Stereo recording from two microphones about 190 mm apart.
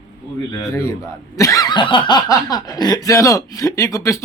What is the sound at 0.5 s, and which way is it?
Speech, 15° left (ahead or behind).